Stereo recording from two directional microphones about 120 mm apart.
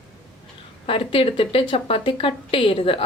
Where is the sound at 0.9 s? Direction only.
50° left (ahead or behind).